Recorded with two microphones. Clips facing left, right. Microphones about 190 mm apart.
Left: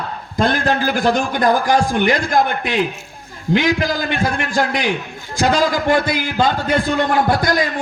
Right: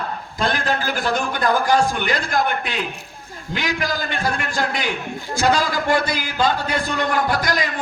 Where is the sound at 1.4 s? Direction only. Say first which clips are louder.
Left 2 dB; 45° left (ahead or behind).